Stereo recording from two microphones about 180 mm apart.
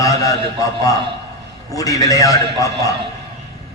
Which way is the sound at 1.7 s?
20° left (ahead or behind).